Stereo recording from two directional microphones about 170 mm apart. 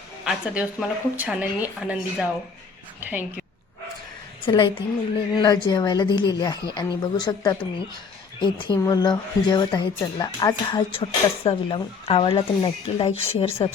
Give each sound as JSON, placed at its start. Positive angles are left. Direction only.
{"t": 0.3, "sound": "a woman's voice", "side_deg": -5}
{"t": 4.4, "sound": "a woman's voice", "side_deg": 30}